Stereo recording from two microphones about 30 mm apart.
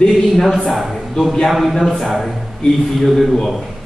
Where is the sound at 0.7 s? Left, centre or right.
Centre.